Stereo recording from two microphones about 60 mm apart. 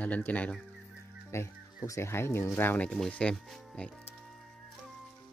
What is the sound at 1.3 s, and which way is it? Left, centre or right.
Speech, left.